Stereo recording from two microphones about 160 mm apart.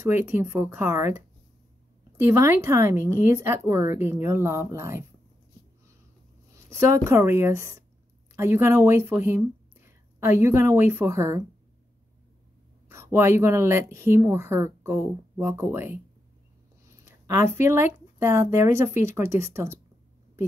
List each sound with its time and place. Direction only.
0.0 s speech: 15° right (ahead or behind)
6.5 s speech: 15° right (ahead or behind)
12.8 s speech: 15° right (ahead or behind)